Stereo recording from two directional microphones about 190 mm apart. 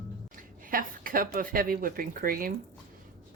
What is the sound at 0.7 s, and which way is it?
Speech, 45° right (ahead or behind).